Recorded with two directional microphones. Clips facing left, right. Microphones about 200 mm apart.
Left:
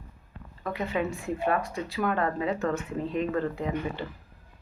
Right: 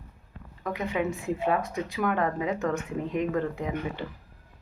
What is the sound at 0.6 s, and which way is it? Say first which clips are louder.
Speech: right 1 dB; 15° right (ahead or behind).